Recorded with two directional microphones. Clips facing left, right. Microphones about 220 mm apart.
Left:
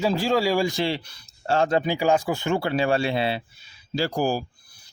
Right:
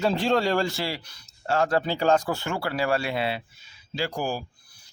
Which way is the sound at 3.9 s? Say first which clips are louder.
Left 5 dB; 40° left (ahead or behind).